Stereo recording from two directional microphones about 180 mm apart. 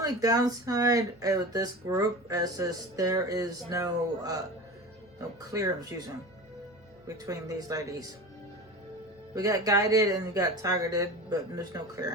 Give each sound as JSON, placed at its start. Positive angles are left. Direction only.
{"t": 0.0, "sound": "speech", "side_deg": -20}
{"t": 5.5, "sound": "speech", "side_deg": -20}
{"t": 7.3, "sound": "speech", "side_deg": -20}
{"t": 9.3, "sound": "speech", "side_deg": -20}